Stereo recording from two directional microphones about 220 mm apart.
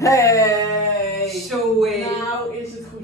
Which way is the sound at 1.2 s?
Centre (ahead or behind).